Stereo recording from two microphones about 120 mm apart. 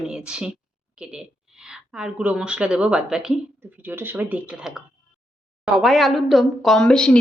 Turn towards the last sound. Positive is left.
turn(degrees=5)  # may be behind; listen again after turning